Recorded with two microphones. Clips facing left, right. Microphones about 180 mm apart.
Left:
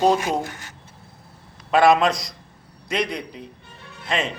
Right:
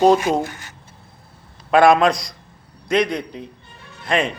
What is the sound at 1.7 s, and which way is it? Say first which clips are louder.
A man's voice: right 3 dB; centre (ahead or behind).